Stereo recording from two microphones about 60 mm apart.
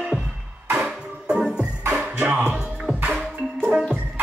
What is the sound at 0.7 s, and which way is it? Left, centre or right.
Music, centre.